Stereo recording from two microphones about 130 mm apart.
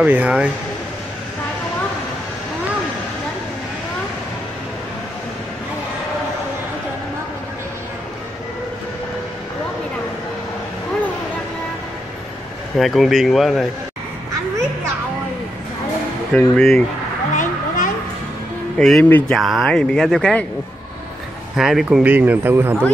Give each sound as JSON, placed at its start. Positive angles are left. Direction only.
{"t": 0.0, "sound": "speech", "side_deg": -10}
{"t": 12.7, "sound": "speech", "side_deg": 0}
{"t": 16.3, "sound": "speech", "side_deg": 5}
{"t": 17.4, "sound": "a sound", "side_deg": 90}
{"t": 18.8, "sound": "speech", "side_deg": 0}
{"t": 19.0, "sound": "speech", "side_deg": 15}
{"t": 19.3, "sound": "speech", "side_deg": 0}
{"t": 21.5, "sound": "speech", "side_deg": -5}